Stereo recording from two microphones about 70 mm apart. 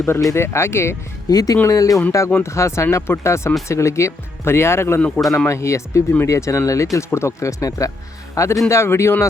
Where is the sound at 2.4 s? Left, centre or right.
Left.